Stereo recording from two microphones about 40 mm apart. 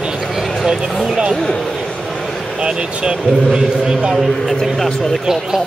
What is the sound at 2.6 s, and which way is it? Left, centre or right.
A man's voice, right.